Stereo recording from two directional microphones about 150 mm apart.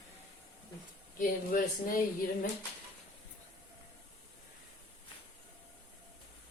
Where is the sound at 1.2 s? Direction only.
65° left (ahead or behind).